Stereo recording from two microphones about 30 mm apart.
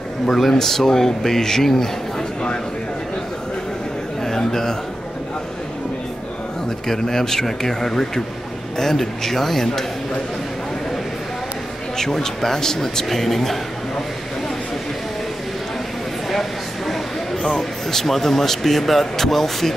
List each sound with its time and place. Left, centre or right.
0.3 s speech: centre
4.2 s a man's voice: centre
6.9 s speech: centre
12.0 s speech: centre
16.3 s a sound: centre